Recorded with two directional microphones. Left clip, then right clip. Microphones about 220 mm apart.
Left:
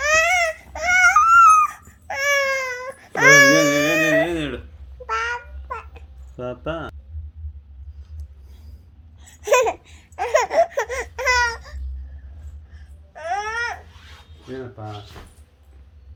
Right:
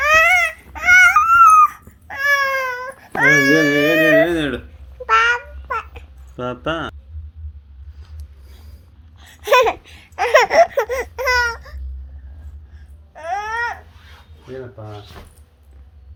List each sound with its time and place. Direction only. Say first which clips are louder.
0.0 s baby cry: right 5 dB; 5° right (ahead or behind)
0.7 s a sound: right 5 dB; 5° left (ahead or behind)
2.0 s baby cry: right 3 dB; 20° left (ahead or behind)
2.4 s baby cry: right 3 dB; centre (ahead or behind)
3.3 s baby cry: left 3 dB; 50° left (ahead or behind)
3.8 s baby cry: right 5 dB; 15° left (ahead or behind)
4.3 s a sound: right 5 dB; 5° right (ahead or behind)
5.0 s babbling: right 10 dB; 5° right (ahead or behind)
8.0 s a sound: right 6 dB; 15° left (ahead or behind)
9.1 s laughter: right 4 dB; 15° left (ahead or behind); by 11.8 s 5° right (ahead or behind)
13.1 s babbling: right 2 dB; 10° right (ahead or behind)